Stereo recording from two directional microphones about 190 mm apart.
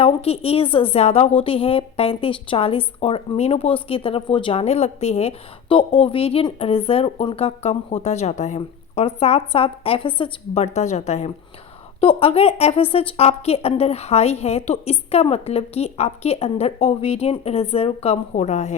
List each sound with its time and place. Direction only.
0.0 s a woman's voice: 30° left (ahead or behind)